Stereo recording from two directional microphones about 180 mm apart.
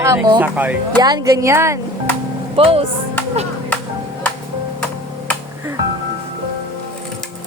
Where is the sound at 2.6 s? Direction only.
30° right (ahead or behind).